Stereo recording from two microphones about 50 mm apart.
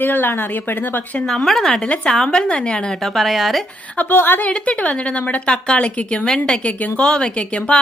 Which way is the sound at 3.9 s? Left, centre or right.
Left.